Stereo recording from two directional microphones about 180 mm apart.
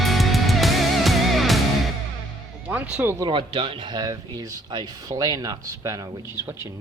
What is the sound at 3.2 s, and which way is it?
Speech, 30° right (ahead or behind).